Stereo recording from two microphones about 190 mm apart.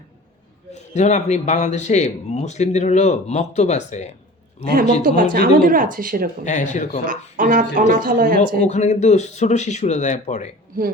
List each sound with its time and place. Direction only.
0.7 s a man's voice: 35° left (ahead or behind)
5.0 s speech: 50° right (ahead or behind)
6.4 s a man's voice: 40° left (ahead or behind)
7.1 s speech: 45° right (ahead or behind)
8.6 s a man's voice: 40° left (ahead or behind)